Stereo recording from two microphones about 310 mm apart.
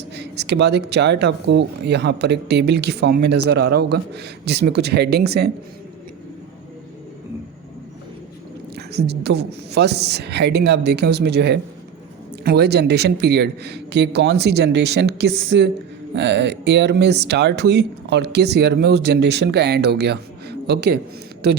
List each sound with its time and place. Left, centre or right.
0.2 s speech: right
8.7 s speech: right